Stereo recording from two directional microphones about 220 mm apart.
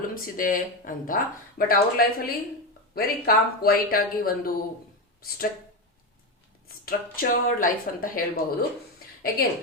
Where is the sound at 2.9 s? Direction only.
45° left (ahead or behind).